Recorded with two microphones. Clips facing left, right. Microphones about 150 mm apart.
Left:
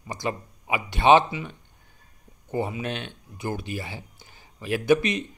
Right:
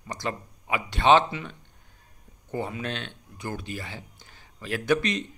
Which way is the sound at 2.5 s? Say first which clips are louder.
Left 3 dB; 15° left (ahead or behind).